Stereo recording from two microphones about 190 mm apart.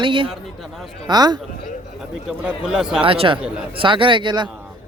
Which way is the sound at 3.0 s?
30° right (ahead or behind).